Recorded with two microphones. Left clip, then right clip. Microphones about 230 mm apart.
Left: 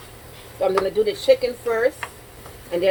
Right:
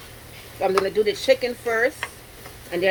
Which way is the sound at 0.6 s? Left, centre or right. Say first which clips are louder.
Left 1 dB; right.